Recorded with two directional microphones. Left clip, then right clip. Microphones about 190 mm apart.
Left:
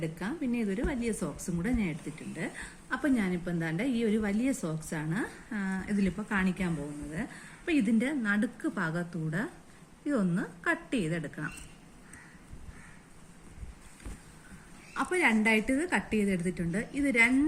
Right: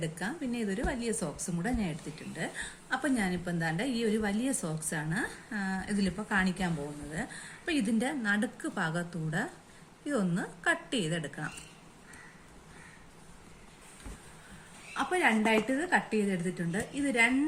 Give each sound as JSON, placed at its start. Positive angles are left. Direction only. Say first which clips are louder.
{"t": 0.2, "sound": "a woman's voice", "louder": "left 1 dB", "side_deg": -25}
{"t": 14.9, "sound": "a woman's voice", "louder": "even", "side_deg": -25}